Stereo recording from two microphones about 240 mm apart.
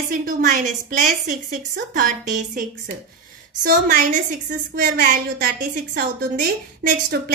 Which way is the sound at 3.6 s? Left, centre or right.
Right.